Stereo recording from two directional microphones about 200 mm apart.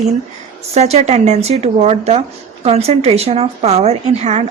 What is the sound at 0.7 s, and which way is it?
A woman's voice, 35° right (ahead or behind).